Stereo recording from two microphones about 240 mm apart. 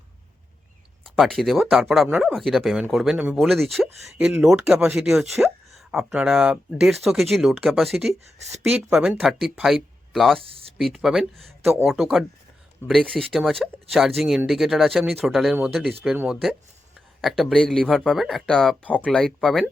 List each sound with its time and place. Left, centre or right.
1.0 s speech: centre
10.4 s speech: right
10.8 s speech: centre